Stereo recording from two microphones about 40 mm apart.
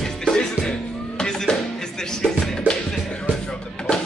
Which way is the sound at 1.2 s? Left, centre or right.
Centre.